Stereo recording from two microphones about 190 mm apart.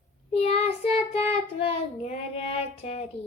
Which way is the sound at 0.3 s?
35° left (ahead or behind).